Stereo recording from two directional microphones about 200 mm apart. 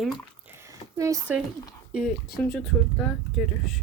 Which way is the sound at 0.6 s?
15° right (ahead or behind).